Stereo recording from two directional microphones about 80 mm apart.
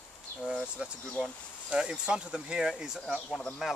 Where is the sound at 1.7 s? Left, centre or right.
Centre.